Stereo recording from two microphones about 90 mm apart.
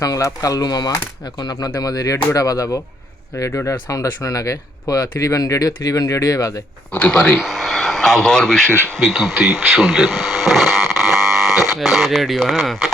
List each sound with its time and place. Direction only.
0.0 s speech: 40° left (ahead or behind)
6.9 s speech: 15° left (ahead or behind)
7.2 s speech: centre (ahead or behind)